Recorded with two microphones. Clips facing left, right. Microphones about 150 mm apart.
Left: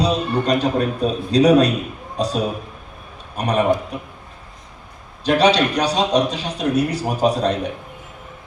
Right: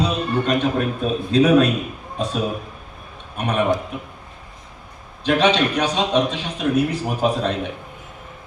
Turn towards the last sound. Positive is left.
turn(degrees=40)  # may be behind; listen again after turning